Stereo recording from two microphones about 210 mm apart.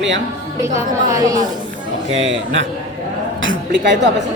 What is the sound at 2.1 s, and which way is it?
A man's voice, 60° right (ahead or behind).